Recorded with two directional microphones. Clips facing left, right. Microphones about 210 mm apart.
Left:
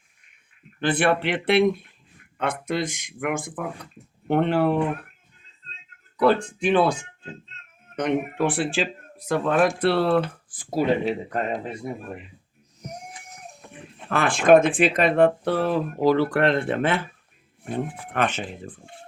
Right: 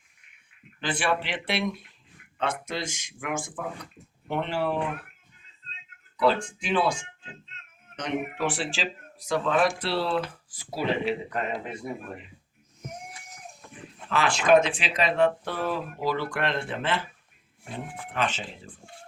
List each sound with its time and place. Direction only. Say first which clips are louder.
0.8 s speech: left 6 dB; 60° left (ahead or behind)
6.1 s speech: left 4 dB; 60° left (ahead or behind)
7.9 s speech: left 6 dB; 55° left (ahead or behind)
14.1 s speech: left 4 dB; 55° left (ahead or behind)
15.9 s speech: left 9 dB; 40° left (ahead or behind)
16.3 s speech: left 8 dB; 60° left (ahead or behind)